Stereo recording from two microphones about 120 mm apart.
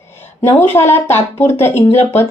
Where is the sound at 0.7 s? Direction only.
20° left (ahead or behind).